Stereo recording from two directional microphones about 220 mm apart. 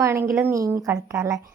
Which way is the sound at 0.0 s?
10° right (ahead or behind).